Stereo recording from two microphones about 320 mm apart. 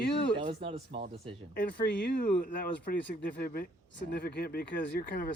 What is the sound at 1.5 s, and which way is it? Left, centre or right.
Speech, left.